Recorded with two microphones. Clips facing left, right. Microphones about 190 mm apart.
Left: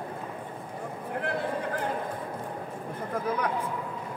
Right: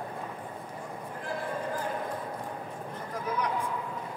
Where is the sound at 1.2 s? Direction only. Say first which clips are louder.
Left 4 dB; 65° left (ahead or behind).